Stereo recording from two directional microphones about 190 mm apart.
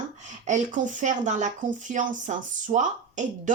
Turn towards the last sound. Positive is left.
turn(degrees=-40)  # may be behind; listen again after turning